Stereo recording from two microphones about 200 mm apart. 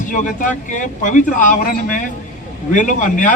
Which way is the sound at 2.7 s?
40° left (ahead or behind).